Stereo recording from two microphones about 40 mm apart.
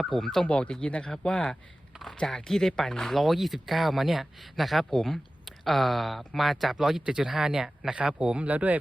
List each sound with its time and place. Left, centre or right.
0.0 s speech: centre
0.4 s speech: left
2.5 s speech: centre
7.0 s speech: centre; by 8.8 s right